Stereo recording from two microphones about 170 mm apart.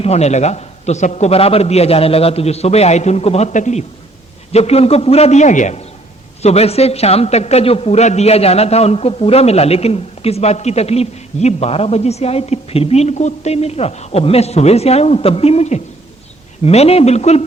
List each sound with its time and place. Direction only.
0.0 s speech: 40° left (ahead or behind)